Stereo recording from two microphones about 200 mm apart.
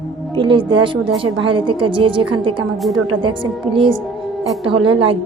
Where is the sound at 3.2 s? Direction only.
25° right (ahead or behind).